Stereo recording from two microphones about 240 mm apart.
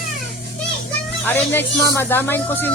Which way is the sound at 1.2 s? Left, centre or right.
Centre.